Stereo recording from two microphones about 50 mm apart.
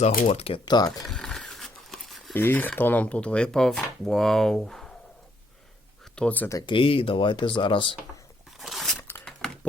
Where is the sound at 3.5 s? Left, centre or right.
Centre.